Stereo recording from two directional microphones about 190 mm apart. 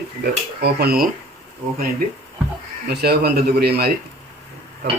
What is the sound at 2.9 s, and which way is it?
A man's voice, 55° right (ahead or behind).